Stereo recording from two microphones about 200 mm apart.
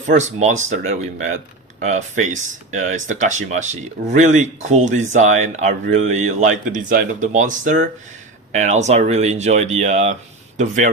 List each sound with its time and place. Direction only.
0.1 s speech: 35° right (ahead or behind)